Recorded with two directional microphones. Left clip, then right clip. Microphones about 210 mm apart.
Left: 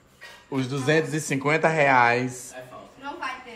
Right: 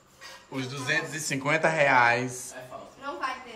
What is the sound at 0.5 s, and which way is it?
Speech, centre (ahead or behind).